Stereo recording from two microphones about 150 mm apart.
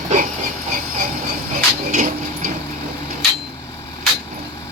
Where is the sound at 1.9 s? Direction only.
60° right (ahead or behind).